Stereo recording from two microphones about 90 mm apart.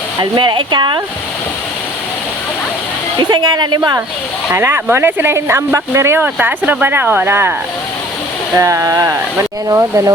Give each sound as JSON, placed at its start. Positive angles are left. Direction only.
{"t": 0.2, "sound": "speech", "side_deg": -60}
{"t": 3.2, "sound": "a woman's voice", "side_deg": -50}
{"t": 4.5, "sound": "speech", "side_deg": -25}
{"t": 6.2, "sound": "speech", "side_deg": -20}
{"t": 8.5, "sound": "speech", "side_deg": -35}